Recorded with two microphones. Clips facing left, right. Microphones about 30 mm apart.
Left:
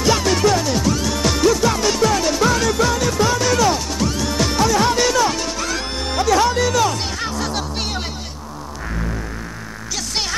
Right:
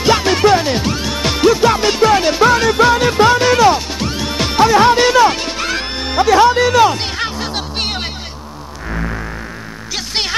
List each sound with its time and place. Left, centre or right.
0.0 s music: right